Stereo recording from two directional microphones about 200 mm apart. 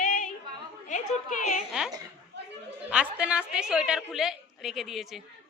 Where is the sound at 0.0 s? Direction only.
40° left (ahead or behind).